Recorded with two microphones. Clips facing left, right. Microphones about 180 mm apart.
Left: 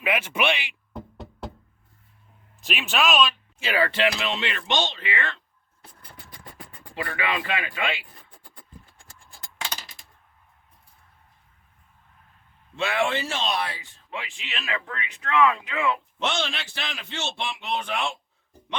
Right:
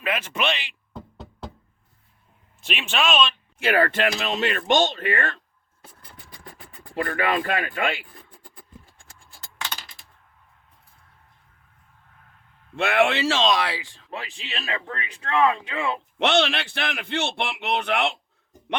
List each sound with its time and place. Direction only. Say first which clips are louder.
0.0 s music: left 1 dB; 10° left (ahead or behind)
2.6 s speech: even; 5° left (ahead or behind)
3.6 s speech: right 2 dB; 55° right (ahead or behind)
6.9 s speech: right 5 dB; 45° right (ahead or behind)
12.7 s speech: right 4 dB; 60° right (ahead or behind); by 14.1 s 90° right
14.1 s speech: right 1 dB; 40° right (ahead or behind)
16.1 s a man's voice: right 7 dB; 65° right (ahead or behind)